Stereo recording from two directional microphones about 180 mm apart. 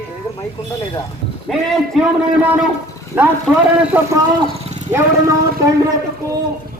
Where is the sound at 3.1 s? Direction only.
10° right (ahead or behind).